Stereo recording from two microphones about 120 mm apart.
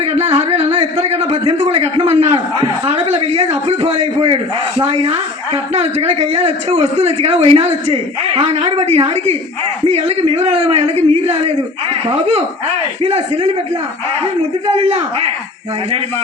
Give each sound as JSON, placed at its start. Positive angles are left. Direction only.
{"t": 0.0, "sound": "a man's voice", "side_deg": -55}
{"t": 14.8, "sound": "a woman's voice", "side_deg": -55}